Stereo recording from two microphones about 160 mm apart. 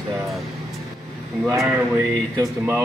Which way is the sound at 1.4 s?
20° right (ahead or behind).